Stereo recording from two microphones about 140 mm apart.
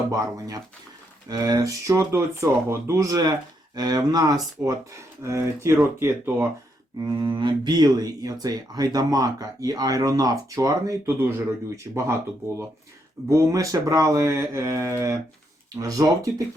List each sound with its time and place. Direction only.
0.1 s speech: 25° right (ahead or behind)
7.0 s speech: 35° right (ahead or behind)
13.2 s speech: 20° right (ahead or behind)